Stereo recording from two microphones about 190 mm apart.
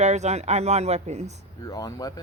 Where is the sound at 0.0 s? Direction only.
35° right (ahead or behind).